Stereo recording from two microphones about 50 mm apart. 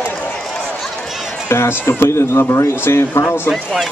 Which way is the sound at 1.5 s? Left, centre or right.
Left.